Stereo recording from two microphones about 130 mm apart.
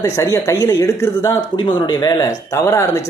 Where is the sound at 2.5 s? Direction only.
20° left (ahead or behind).